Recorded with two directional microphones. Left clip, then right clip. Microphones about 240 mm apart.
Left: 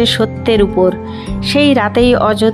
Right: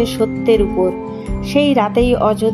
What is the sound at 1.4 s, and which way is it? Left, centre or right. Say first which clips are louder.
Speech: left 3 dB; left.